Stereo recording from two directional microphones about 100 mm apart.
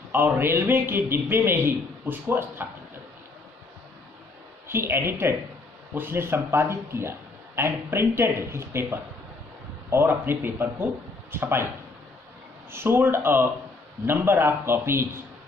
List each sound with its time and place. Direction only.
0.1 s speech: 20° right (ahead or behind)
4.6 s speech: 25° right (ahead or behind)
12.7 s speech: 20° right (ahead or behind)